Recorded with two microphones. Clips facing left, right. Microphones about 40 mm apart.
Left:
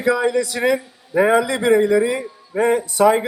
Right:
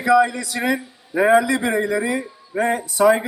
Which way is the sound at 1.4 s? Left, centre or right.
Left.